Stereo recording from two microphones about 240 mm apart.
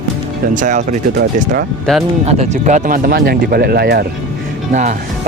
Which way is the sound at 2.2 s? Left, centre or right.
Right.